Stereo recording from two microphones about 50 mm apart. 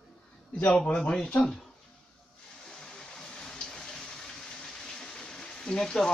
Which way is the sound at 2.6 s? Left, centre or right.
Centre.